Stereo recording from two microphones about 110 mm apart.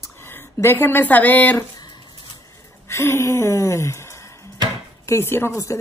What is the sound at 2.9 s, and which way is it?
Gasp, 25° left (ahead or behind).